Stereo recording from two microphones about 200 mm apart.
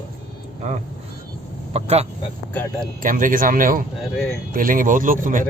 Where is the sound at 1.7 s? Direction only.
30° right (ahead or behind).